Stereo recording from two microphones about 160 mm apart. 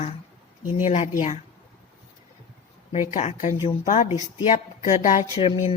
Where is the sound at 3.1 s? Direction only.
50° left (ahead or behind).